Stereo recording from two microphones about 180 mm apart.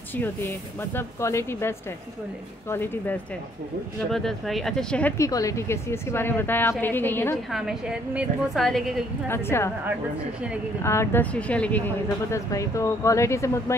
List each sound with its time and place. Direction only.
0.9 s speech: 15° left (ahead or behind)
7.5 s a woman's voice: 5° right (ahead or behind)
9.3 s speech: 15° left (ahead or behind)
10.8 s speech: 15° left (ahead or behind)